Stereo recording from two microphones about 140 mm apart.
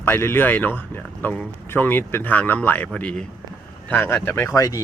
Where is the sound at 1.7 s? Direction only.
15° left (ahead or behind).